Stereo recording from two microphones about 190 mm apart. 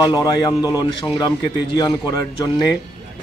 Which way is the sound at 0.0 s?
20° left (ahead or behind).